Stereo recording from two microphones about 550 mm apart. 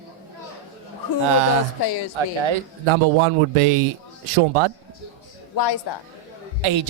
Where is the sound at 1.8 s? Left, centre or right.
Left.